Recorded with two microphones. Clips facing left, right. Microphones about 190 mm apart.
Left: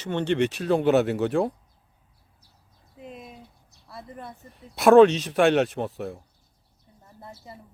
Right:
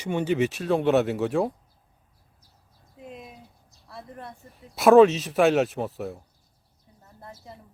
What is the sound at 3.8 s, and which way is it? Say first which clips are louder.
A man's voice: left 1 dB; centre (ahead or behind).